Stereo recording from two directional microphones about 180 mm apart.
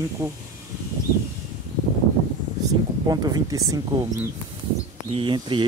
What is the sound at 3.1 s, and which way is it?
Speech, 20° right (ahead or behind).